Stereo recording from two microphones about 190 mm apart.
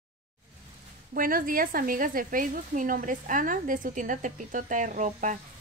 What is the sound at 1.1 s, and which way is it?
Speech, 45° right (ahead or behind).